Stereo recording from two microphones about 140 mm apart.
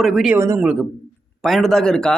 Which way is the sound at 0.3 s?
20° right (ahead or behind).